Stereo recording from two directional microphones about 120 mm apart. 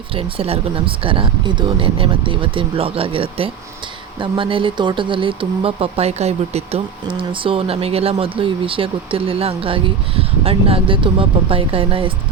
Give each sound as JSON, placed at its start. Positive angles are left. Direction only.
{"t": 0.1, "sound": "speech", "side_deg": -50}